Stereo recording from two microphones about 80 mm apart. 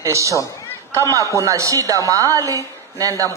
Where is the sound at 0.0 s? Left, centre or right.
Right.